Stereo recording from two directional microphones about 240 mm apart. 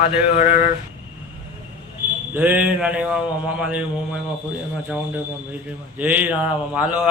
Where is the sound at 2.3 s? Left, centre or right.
Centre.